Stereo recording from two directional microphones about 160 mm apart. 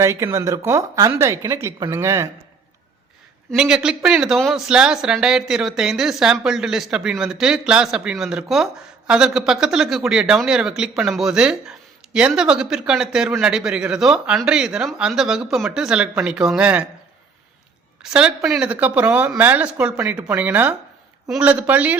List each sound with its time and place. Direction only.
0.0 s speech: 15° right (ahead or behind)
3.5 s speech: 5° right (ahead or behind)
18.0 s speech: 5° right (ahead or behind)